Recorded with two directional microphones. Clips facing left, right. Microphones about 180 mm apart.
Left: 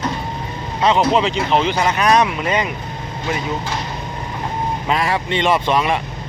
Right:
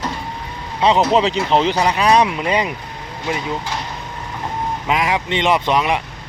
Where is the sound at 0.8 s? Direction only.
25° right (ahead or behind).